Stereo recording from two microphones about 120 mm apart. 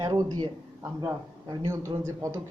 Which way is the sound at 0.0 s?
35° right (ahead or behind).